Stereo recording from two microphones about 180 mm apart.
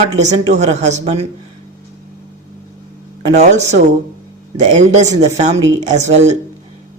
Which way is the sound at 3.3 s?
40° right (ahead or behind).